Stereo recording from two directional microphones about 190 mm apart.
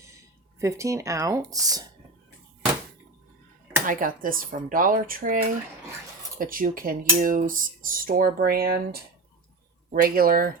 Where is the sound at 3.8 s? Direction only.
45° right (ahead or behind).